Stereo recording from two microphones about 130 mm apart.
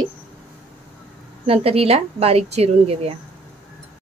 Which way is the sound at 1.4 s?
45° right (ahead or behind).